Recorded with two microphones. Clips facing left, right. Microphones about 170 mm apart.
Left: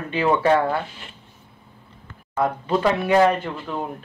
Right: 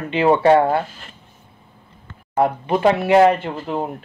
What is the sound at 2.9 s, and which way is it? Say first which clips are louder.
Speech: right 4 dB; 25° right (ahead or behind).